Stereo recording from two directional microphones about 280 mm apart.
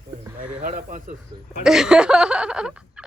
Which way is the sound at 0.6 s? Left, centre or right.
Right.